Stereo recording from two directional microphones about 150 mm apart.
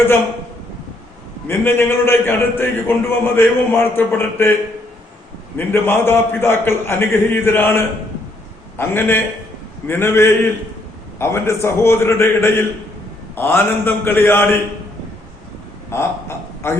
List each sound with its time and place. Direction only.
1.5 s a man's voice: 15° left (ahead or behind)
5.5 s a man's voice: 15° left (ahead or behind)
8.8 s a man's voice: 15° left (ahead or behind)
15.9 s a man's voice: 15° left (ahead or behind)